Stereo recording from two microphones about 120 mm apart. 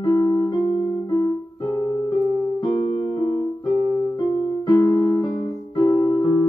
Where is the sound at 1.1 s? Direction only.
25° left (ahead or behind).